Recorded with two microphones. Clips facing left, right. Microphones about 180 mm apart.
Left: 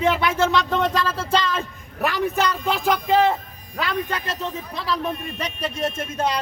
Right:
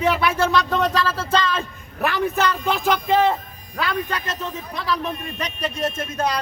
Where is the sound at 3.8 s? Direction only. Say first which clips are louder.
Right 1 dB; 25° left (ahead or behind).